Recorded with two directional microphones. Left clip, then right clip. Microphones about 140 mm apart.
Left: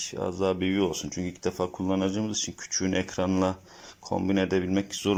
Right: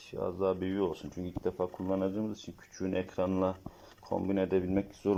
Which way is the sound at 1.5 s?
25° left (ahead or behind).